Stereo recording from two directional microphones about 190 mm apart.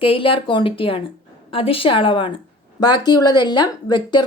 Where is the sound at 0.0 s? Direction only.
30° left (ahead or behind).